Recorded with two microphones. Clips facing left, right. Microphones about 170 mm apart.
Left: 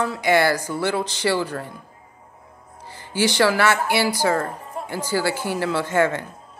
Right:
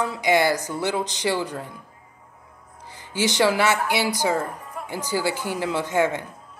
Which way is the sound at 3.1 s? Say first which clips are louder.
Left 2 dB; 20° right (ahead or behind).